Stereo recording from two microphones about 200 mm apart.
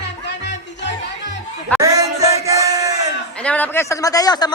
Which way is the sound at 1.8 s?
15° right (ahead or behind).